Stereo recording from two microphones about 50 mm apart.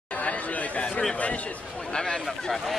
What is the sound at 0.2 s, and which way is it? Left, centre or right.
Chatter, left.